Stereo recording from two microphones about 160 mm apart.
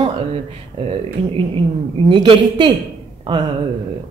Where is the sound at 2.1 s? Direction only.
30° right (ahead or behind).